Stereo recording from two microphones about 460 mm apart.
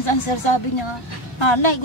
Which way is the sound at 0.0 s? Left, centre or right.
Left.